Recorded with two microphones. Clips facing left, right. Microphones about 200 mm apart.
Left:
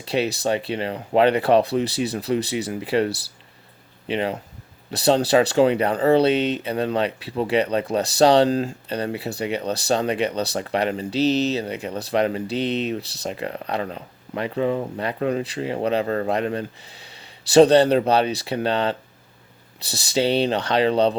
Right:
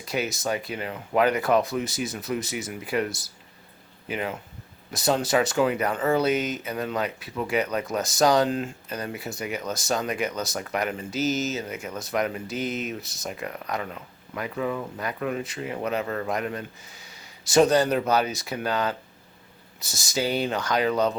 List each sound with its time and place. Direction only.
0.0 s speech: 30° left (ahead or behind)